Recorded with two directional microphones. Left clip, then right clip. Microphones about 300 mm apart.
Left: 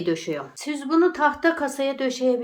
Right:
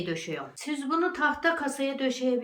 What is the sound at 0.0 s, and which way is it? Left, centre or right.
Speech, centre.